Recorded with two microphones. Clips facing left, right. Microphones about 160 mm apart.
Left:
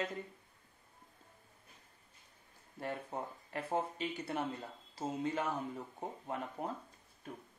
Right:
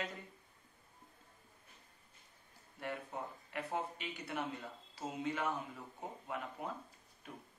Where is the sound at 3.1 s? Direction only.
35° left (ahead or behind).